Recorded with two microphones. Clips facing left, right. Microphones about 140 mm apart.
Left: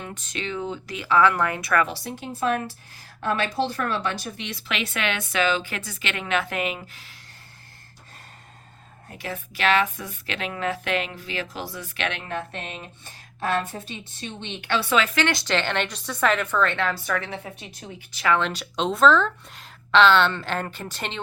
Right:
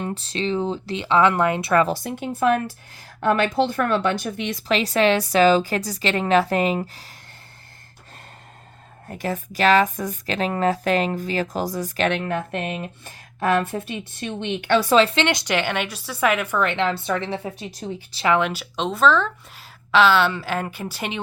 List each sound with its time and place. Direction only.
0.0 s a woman's voice: 30° right (ahead or behind)
1.9 s speech: 50° right (ahead or behind)
4.7 s speech: 35° right (ahead or behind)
9.0 s speech: 45° right (ahead or behind)
14.8 s a woman's voice: 30° right (ahead or behind)
18.3 s speech: 10° right (ahead or behind)